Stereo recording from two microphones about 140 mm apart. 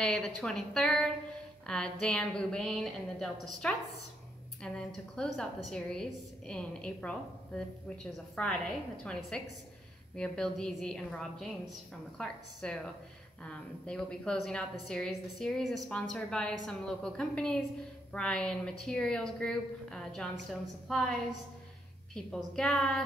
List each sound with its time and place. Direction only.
0.0 s a woman's voice: 5° left (ahead or behind)
22.6 s a woman's voice: 10° left (ahead or behind)